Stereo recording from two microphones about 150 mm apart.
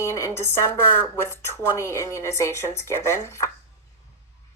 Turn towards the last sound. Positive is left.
turn(degrees=20)  # may be behind; listen again after turning